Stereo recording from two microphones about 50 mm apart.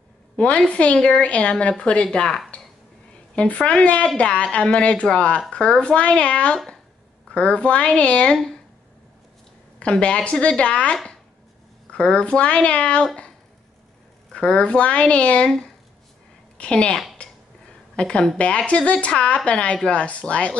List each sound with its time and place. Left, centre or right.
0.7 s a woman's voice: left
3.3 s a woman's voice: left
9.8 s a woman's voice: left
14.3 s a woman's voice: centre
16.5 s a woman's voice: left